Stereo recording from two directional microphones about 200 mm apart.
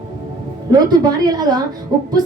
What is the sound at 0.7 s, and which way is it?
Speech, 20° right (ahead or behind).